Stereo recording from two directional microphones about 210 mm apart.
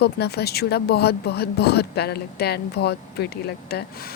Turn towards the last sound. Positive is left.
turn(degrees=50)  # may be behind; listen again after turning